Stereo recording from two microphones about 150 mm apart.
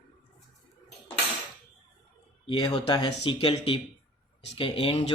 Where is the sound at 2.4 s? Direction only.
30° left (ahead or behind).